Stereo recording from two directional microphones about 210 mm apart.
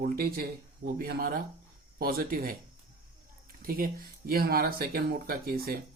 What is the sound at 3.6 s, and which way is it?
Speech, 45° right (ahead or behind).